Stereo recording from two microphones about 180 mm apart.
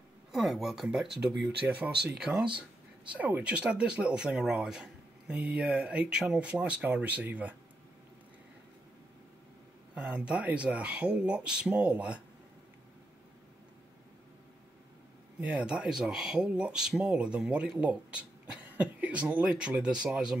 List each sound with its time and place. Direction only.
0.3 s speech: centre (ahead or behind)
1.3 s speech: 75° right (ahead or behind)
2.0 s speech: 5° right (ahead or behind)
9.9 s speech: 5° right (ahead or behind)
15.4 s speech: 5° right (ahead or behind)